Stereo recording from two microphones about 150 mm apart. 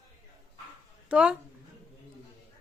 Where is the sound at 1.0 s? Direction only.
5° right (ahead or behind).